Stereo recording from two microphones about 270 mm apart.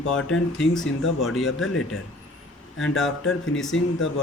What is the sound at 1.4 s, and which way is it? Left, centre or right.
Speech, left.